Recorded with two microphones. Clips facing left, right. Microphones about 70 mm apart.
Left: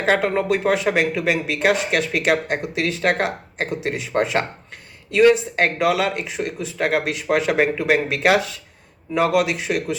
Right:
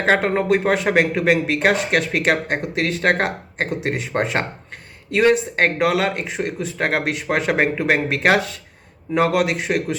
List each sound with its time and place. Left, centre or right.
0.1 s speech: right